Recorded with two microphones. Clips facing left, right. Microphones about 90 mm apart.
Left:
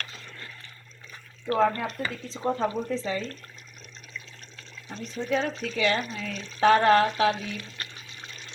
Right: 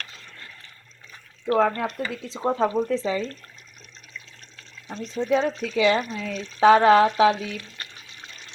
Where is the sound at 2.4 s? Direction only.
45° right (ahead or behind).